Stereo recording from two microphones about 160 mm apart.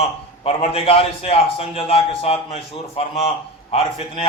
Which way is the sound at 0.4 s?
35° left (ahead or behind).